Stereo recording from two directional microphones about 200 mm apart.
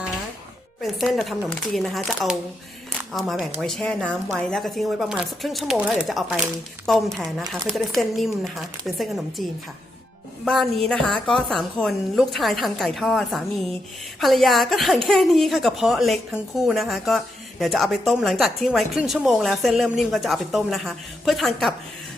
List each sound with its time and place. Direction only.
0.8 s a woman's voice: centre (ahead or behind)
10.4 s a woman's voice: centre (ahead or behind)